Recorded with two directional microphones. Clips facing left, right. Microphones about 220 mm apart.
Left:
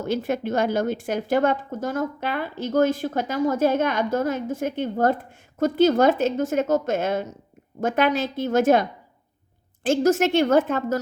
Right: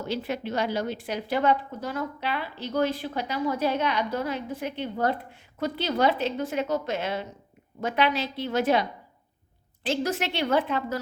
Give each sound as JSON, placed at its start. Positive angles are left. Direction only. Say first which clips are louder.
{"t": 0.0, "sound": "a woman's voice", "louder": "left 5 dB", "side_deg": 45}